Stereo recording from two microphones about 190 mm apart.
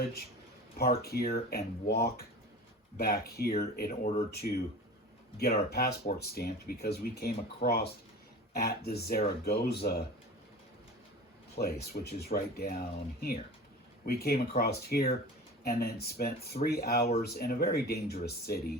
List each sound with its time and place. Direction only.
0.8 s speech: 55° left (ahead or behind)
5.7 s speech: 55° left (ahead or behind)
11.5 s speech: 55° left (ahead or behind)